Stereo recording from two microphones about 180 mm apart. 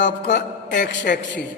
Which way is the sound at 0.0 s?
75° left (ahead or behind).